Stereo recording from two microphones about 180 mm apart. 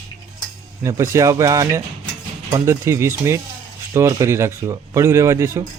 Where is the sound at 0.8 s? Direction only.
15° right (ahead or behind).